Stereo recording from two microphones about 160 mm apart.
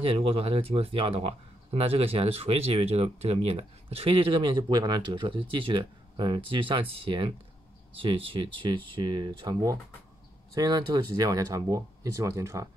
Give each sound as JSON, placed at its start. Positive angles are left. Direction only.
{"t": 0.0, "sound": "speech", "side_deg": -35}